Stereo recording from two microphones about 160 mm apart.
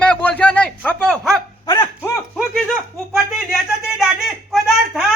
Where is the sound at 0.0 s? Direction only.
10° left (ahead or behind).